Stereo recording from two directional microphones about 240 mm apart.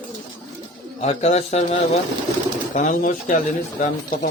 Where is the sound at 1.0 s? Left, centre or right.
Left.